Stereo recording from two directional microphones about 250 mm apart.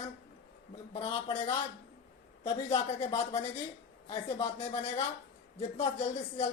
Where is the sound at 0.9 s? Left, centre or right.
Left.